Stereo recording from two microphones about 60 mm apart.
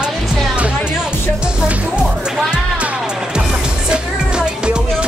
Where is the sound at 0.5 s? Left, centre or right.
Centre.